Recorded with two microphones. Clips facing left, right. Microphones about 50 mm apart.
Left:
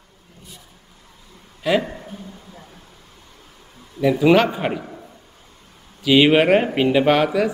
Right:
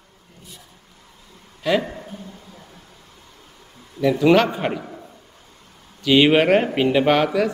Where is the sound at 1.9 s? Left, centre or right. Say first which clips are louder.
Even; centre.